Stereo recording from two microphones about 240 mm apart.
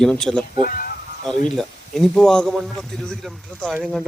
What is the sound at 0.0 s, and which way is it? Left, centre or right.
Speech, centre.